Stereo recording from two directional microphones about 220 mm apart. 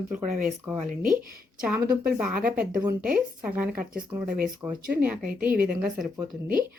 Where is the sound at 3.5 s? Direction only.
5° right (ahead or behind).